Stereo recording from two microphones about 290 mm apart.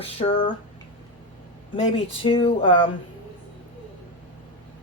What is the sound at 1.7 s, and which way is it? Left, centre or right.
Speech, left.